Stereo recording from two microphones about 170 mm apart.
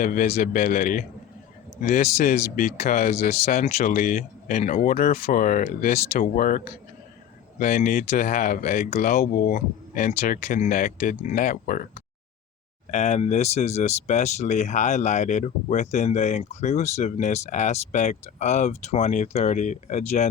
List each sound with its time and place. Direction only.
0.0 s speech: 55° left (ahead or behind)
7.6 s speech: 55° left (ahead or behind)